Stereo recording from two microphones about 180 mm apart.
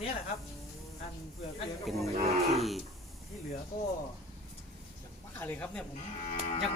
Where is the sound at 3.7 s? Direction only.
60° left (ahead or behind).